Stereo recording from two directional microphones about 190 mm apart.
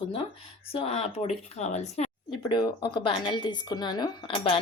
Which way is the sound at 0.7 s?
35° left (ahead or behind).